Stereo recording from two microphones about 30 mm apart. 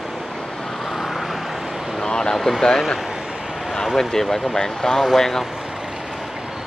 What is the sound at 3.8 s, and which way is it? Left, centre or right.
Speech, centre.